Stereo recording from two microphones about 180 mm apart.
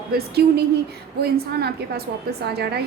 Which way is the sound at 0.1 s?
60° right (ahead or behind).